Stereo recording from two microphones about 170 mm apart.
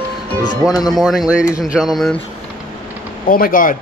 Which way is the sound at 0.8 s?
Centre (ahead or behind).